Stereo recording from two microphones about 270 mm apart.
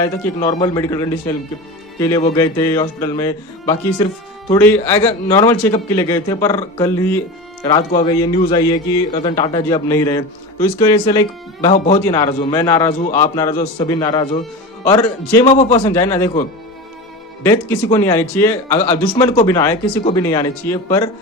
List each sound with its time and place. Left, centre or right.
0.0 s a man's voice: centre
11.7 s a man's voice: left
12.0 s a man's voice: centre
15.4 s a man's voice: left
15.8 s a man's voice: centre
17.4 s a man's voice: centre